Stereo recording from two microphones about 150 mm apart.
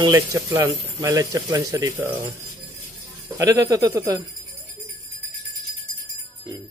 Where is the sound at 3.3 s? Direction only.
25° right (ahead or behind).